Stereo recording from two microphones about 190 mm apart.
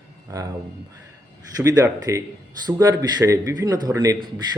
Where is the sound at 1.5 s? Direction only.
20° right (ahead or behind).